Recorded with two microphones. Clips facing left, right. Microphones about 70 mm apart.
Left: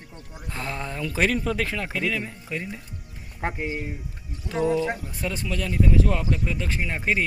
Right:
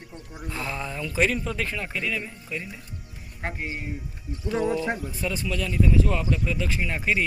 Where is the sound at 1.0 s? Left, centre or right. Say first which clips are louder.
Left 1 dB; left.